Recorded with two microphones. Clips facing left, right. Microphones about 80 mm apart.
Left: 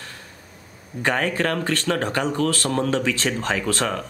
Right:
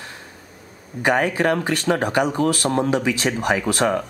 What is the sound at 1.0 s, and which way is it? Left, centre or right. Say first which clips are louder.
Speech: right 3 dB; centre.